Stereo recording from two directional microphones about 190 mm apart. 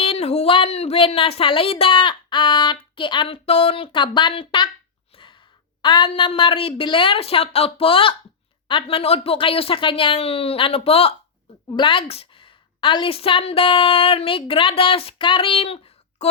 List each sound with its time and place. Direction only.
0.0 s speech: 30° left (ahead or behind)
5.1 s a sound: 25° left (ahead or behind)
5.8 s a woman's voice: 25° left (ahead or behind)